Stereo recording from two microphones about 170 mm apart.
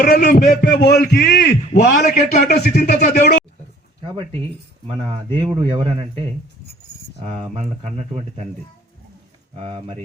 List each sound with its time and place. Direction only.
0.0 s a man's voice: 60° left (ahead or behind)
5.3 s speech: 30° right (ahead or behind)
7.3 s speech: 35° right (ahead or behind)
9.6 s speech: 35° right (ahead or behind)